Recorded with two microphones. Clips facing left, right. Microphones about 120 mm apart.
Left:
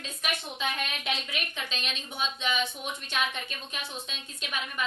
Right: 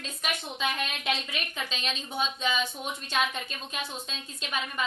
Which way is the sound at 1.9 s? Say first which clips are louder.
Right 5 dB; 35° right (ahead or behind).